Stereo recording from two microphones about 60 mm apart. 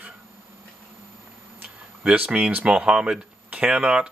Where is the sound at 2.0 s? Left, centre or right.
Right.